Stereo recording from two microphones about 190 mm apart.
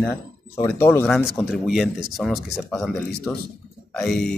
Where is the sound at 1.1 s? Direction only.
Centre (ahead or behind).